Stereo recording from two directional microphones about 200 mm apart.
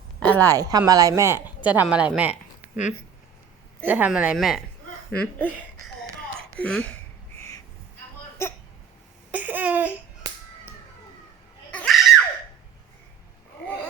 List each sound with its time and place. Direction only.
0.2 s speech: 10° left (ahead or behind)
0.4 s speech: 20° right (ahead or behind)
2.7 s speech: 35° left (ahead or behind)
3.8 s speech: 10° right (ahead or behind); by 5.5 s 5° left (ahead or behind)
6.6 s speech: 5° left (ahead or behind)
7.3 s crow: 15° left (ahead or behind)
8.4 s speech: 10° left (ahead or behind)
9.3 s laughter: 10° right (ahead or behind)
11.7 s screaming: 5° left (ahead or behind)